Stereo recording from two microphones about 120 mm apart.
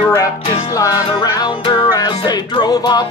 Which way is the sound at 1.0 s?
40° left (ahead or behind).